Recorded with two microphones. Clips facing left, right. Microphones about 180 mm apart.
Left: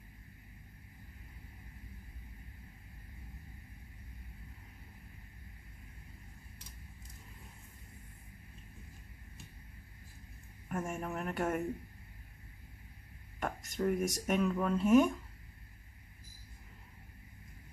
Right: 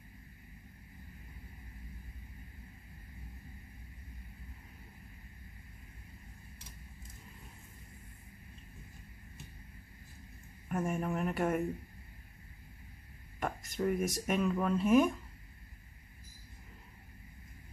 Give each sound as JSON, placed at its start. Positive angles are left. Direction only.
{"t": 10.7, "sound": "speech", "side_deg": 0}
{"t": 13.4, "sound": "speech", "side_deg": 0}